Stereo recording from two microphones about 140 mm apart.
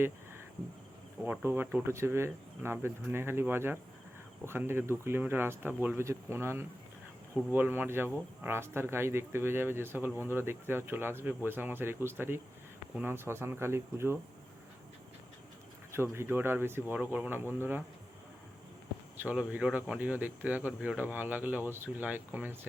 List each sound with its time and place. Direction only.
1.5 s speech: 15° right (ahead or behind)
15.9 s speech: 15° right (ahead or behind)
19.1 s speech: 10° right (ahead or behind)